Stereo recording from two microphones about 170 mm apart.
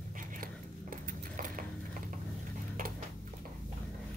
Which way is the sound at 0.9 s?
50° right (ahead or behind).